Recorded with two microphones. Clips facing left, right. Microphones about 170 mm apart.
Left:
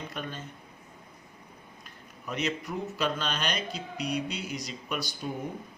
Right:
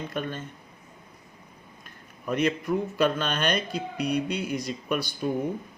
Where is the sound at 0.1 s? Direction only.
50° right (ahead or behind).